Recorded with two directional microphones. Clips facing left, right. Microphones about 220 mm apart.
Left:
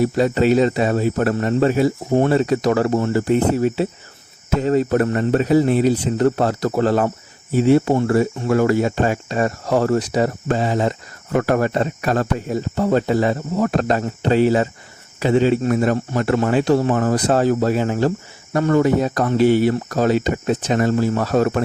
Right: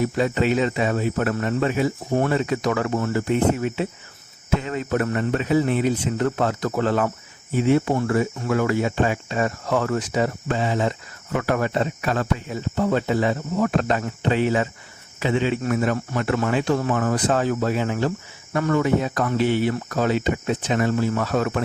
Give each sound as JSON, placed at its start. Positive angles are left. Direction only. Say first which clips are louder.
{"t": 0.0, "sound": "speech", "louder": "left 5 dB", "side_deg": 35}